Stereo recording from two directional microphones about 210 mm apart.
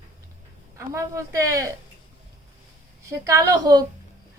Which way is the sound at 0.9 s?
15° right (ahead or behind).